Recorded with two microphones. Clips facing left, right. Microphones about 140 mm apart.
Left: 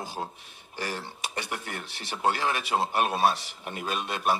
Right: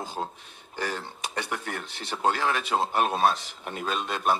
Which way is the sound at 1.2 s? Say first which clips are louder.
Right 2 dB; 15° left (ahead or behind).